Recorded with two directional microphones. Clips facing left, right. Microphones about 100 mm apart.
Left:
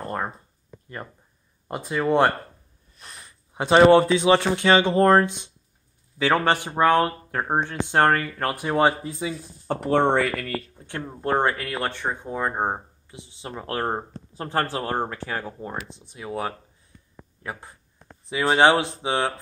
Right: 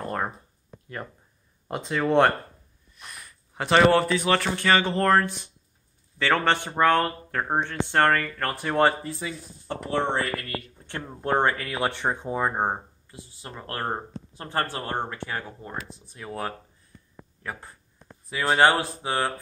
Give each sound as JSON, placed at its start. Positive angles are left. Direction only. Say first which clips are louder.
{"t": 1.7, "sound": "speech", "louder": "left 1 dB", "side_deg": 5}
{"t": 3.0, "sound": "a sound", "louder": "right 1 dB", "side_deg": 30}
{"t": 3.3, "sound": "speech", "louder": "left 3 dB", "side_deg": 20}
{"t": 9.7, "sound": "speech", "louder": "left 6 dB", "side_deg": 55}
{"t": 10.9, "sound": "speech", "louder": "left 1 dB", "side_deg": 5}
{"t": 11.9, "sound": "speech", "louder": "right 1 dB", "side_deg": -20}
{"t": 13.1, "sound": "speech", "louder": "left 5 dB", "side_deg": 20}
{"t": 14.3, "sound": "speech", "louder": "left 3 dB", "side_deg": 30}